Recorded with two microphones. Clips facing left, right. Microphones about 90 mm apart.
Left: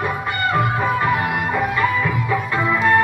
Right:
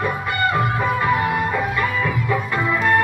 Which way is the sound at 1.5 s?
5° left (ahead or behind).